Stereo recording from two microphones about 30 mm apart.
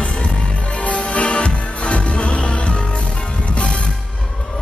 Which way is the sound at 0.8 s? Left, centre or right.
Left.